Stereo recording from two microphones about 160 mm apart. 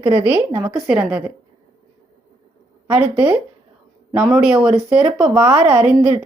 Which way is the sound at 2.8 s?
5° right (ahead or behind).